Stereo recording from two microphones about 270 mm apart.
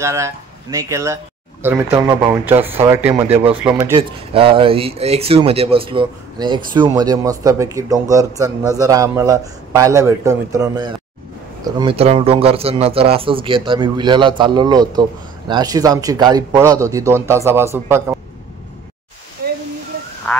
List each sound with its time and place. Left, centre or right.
0.0 s speech: centre
19.4 s waterfall: right